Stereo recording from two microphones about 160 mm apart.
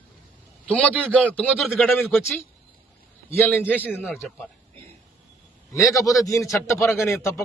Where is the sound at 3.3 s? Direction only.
15° left (ahead or behind).